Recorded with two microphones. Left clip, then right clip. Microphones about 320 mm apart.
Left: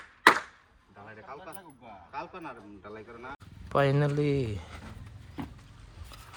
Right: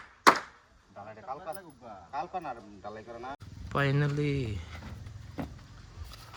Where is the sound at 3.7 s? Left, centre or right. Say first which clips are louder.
Left 4 dB; centre.